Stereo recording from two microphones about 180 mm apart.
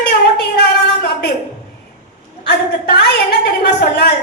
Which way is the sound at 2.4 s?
70° left (ahead or behind).